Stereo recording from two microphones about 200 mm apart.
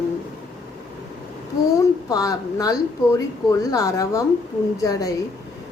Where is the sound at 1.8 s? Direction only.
15° left (ahead or behind).